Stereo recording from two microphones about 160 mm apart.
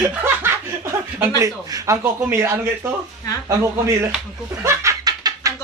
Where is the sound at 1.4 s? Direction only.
20° right (ahead or behind).